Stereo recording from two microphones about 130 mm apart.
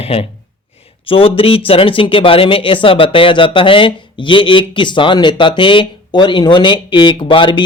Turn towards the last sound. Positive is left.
turn(degrees=40)  # may be behind; listen again after turning